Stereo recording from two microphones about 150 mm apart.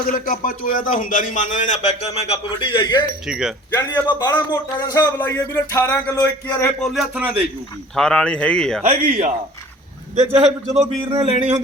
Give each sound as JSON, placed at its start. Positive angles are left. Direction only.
{"t": 0.1, "sound": "a man's voice", "side_deg": 65}
{"t": 3.2, "sound": "a man's voice", "side_deg": -5}
{"t": 4.4, "sound": "speech", "side_deg": 30}
{"t": 7.9, "sound": "a man's voice", "side_deg": 5}
{"t": 8.9, "sound": "a man's voice", "side_deg": -50}